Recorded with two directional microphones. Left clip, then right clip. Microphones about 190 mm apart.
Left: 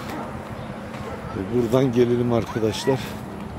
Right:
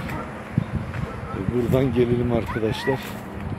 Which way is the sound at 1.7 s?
5° left (ahead or behind).